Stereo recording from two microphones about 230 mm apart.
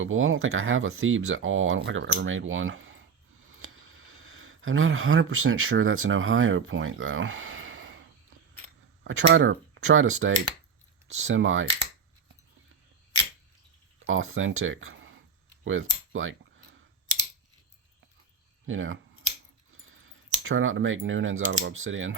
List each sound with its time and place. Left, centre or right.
0.0 s speech: right
9.0 s speech: right
14.1 s speech: right
18.6 s scissors: right
19.7 s a sound: right
20.4 s speech: right